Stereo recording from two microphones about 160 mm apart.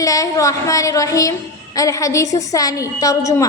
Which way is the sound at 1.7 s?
20° left (ahead or behind).